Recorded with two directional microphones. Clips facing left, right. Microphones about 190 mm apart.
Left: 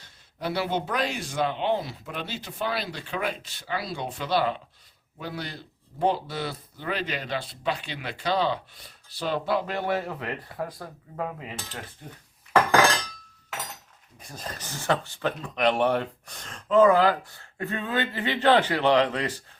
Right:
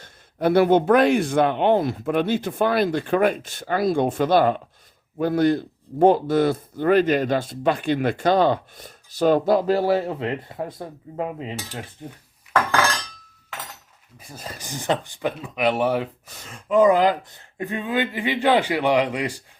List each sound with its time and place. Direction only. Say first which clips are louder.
0.0 s speech: right 11 dB; 55° right (ahead or behind); by 12.2 s 15° right (ahead or behind)
14.2 s speech: right 1 dB; 10° right (ahead or behind)